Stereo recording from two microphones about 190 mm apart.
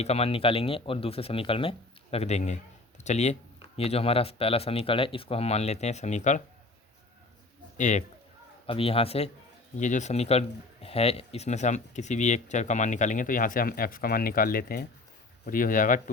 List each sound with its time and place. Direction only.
0.0 s speech: 30° left (ahead or behind)
7.8 s speech: 40° left (ahead or behind)
8.6 s speech: 30° left (ahead or behind); by 16.0 s 45° left (ahead or behind)